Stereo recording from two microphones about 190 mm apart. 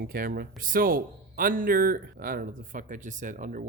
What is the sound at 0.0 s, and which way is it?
Speech, 50° right (ahead or behind).